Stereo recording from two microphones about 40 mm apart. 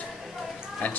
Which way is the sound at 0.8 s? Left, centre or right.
Left.